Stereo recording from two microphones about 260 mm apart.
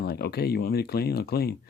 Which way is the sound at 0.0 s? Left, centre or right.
Left.